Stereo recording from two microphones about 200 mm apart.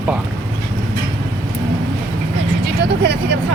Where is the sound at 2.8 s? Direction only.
55° right (ahead or behind).